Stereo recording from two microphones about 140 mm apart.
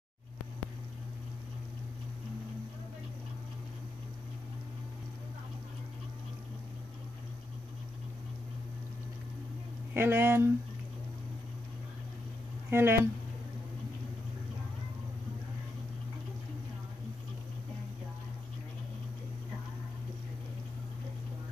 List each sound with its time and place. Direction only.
9.9 s speech: 15° right (ahead or behind)
12.6 s speech: 15° right (ahead or behind)